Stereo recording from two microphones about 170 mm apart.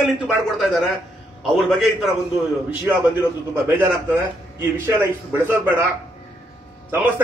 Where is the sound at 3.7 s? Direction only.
10° right (ahead or behind).